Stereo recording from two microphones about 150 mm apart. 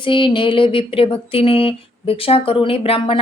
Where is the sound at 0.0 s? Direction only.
35° left (ahead or behind).